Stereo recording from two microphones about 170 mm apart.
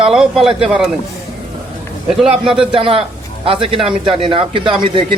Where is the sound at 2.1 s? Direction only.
5° right (ahead or behind).